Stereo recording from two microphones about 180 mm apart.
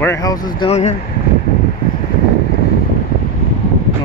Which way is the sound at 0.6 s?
35° left (ahead or behind).